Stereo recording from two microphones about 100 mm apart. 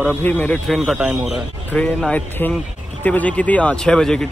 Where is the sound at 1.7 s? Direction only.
10° left (ahead or behind).